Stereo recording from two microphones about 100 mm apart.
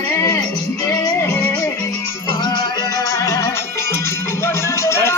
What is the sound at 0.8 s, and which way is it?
Music, 35° left (ahead or behind).